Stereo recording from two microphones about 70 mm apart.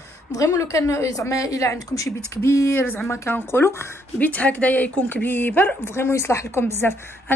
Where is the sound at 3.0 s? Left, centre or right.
Left.